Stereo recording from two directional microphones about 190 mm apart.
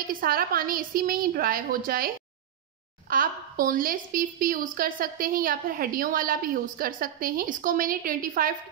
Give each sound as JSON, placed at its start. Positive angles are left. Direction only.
{"t": 0.1, "sound": "a woman's voice", "side_deg": -50}